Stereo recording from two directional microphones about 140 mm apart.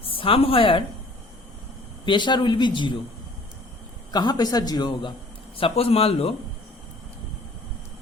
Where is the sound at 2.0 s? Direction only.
35° left (ahead or behind).